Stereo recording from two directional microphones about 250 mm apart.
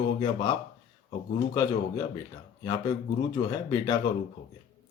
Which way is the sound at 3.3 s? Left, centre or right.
Centre.